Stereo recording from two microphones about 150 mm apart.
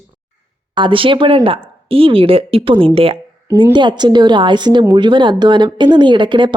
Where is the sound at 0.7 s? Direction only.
35° right (ahead or behind).